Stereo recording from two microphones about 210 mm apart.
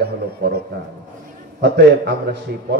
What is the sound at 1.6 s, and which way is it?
Speech, 55° right (ahead or behind).